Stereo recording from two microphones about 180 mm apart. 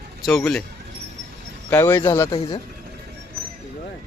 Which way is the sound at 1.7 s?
15° left (ahead or behind).